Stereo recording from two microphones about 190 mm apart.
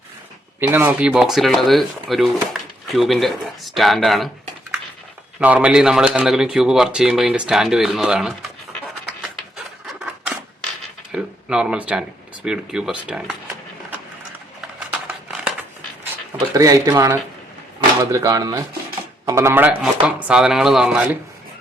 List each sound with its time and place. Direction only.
0.7 s speech: 10° right (ahead or behind)
5.4 s speech: 5° right (ahead or behind)
9.8 s scissors: 5° right (ahead or behind)
11.1 s speech: 5° right (ahead or behind)
14.8 s a sound: 5° right (ahead or behind)
16.6 s speech: 15° right (ahead or behind)